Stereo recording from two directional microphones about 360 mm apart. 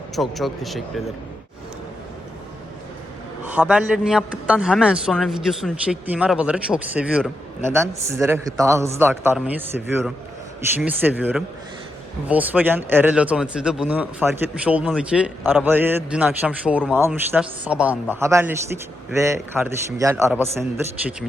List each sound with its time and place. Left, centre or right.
0.2 s speech: centre
3.4 s a man's voice: centre